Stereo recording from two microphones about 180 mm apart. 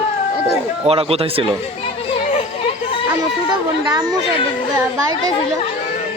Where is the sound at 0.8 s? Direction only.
35° right (ahead or behind).